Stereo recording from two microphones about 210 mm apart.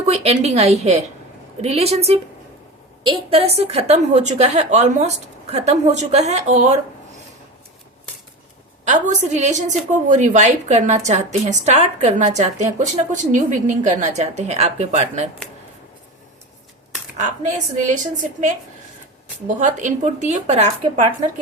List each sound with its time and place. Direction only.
0.0 s a woman's voice: 30° right (ahead or behind)
8.8 s a woman's voice: 35° right (ahead or behind)
17.2 s a woman's voice: 35° right (ahead or behind)
19.5 s a woman's voice: 35° right (ahead or behind)